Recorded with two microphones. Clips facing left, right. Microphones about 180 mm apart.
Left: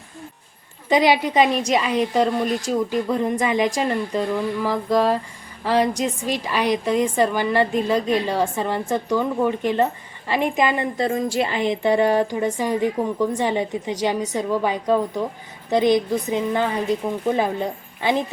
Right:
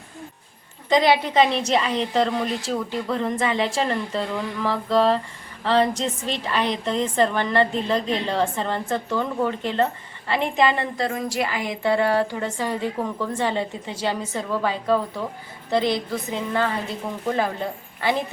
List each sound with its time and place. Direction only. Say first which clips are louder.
0.9 s a woman's voice: left 1 dB; 15° left (ahead or behind)